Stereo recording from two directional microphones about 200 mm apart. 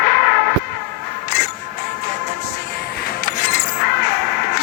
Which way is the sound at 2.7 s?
50° left (ahead or behind).